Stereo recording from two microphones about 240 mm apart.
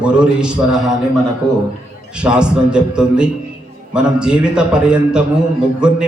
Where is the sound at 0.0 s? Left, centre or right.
Centre.